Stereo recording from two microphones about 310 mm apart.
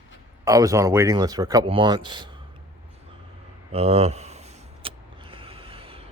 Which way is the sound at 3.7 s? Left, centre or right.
Centre.